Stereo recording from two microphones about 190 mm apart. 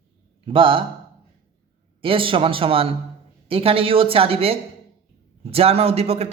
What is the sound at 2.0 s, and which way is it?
A man's voice, 30° right (ahead or behind).